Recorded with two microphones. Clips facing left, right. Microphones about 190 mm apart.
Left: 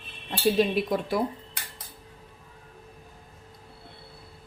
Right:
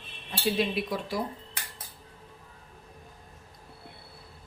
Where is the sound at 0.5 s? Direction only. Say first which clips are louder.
Left 5 dB; 45° left (ahead or behind).